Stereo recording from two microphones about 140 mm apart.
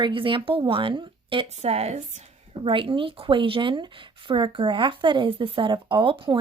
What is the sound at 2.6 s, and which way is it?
A woman's voice, 40° right (ahead or behind).